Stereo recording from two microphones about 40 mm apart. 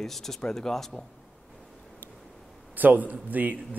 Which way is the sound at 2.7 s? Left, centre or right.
Right.